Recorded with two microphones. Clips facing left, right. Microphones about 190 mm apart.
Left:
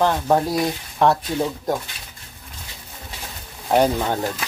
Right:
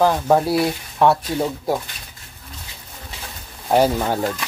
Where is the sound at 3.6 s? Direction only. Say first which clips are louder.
Right 1 dB; 5° right (ahead or behind).